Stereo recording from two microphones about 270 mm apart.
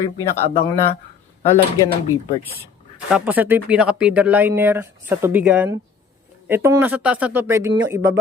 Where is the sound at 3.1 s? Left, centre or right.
Centre.